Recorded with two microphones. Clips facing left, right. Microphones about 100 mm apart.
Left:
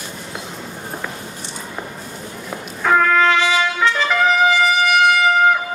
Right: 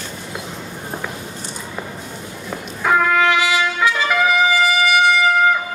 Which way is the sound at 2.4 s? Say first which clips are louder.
Left 1 dB; 5° right (ahead or behind).